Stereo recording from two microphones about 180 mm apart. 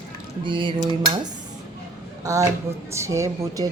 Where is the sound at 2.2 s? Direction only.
20° right (ahead or behind).